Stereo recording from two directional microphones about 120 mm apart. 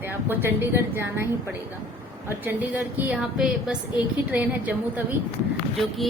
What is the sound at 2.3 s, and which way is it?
Speech, 15° right (ahead or behind).